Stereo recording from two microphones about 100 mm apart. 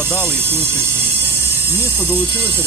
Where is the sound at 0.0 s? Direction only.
25° right (ahead or behind).